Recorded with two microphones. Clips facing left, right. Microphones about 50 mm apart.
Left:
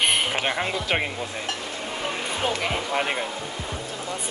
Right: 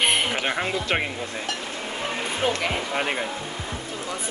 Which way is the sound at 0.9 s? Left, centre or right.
Centre.